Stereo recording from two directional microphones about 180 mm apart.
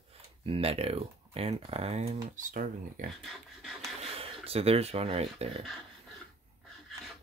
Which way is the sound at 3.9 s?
35° right (ahead or behind).